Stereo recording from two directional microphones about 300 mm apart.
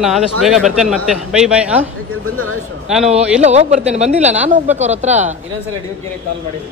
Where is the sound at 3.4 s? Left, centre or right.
Right.